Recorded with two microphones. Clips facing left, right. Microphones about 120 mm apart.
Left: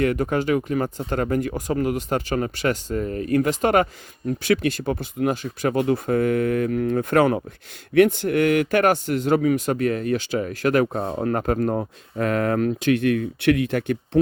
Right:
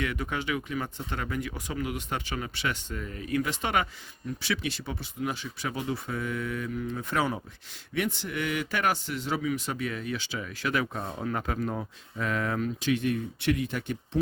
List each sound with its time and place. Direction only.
0.0 s a man's voice: 45° left (ahead or behind); by 14.2 s 60° left (ahead or behind)